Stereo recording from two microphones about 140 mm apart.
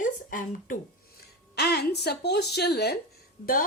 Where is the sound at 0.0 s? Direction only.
75° left (ahead or behind).